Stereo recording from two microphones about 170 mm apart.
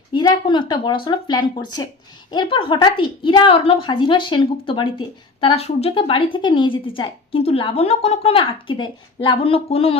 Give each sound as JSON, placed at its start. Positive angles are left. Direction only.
{"t": 0.1, "sound": "speech", "side_deg": 25}